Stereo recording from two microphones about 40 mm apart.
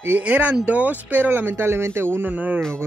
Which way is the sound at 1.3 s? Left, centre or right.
Right.